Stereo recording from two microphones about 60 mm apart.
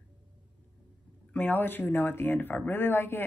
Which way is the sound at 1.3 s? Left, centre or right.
Left.